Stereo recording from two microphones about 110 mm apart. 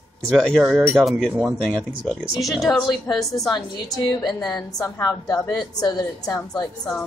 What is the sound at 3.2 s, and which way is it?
A woman's voice, 30° left (ahead or behind).